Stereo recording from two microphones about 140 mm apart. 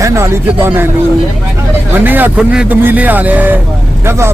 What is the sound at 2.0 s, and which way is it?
A man's voice, 15° right (ahead or behind).